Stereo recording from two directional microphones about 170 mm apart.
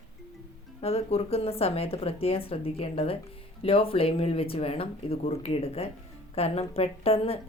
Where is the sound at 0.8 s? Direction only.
35° left (ahead or behind).